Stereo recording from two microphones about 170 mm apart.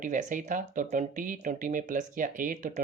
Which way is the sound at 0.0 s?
50° right (ahead or behind).